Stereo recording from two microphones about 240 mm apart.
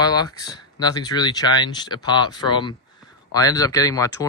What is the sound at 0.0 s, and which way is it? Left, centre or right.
Speech, centre.